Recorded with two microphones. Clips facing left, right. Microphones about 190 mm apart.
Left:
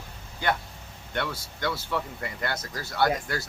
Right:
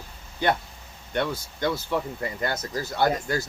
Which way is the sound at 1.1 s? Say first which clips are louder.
Right 4 dB; 25° right (ahead or behind).